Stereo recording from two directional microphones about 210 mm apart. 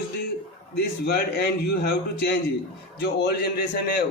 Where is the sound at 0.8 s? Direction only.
45° left (ahead or behind).